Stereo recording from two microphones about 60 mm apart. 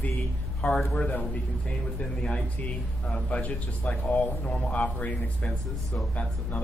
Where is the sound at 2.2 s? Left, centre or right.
Left.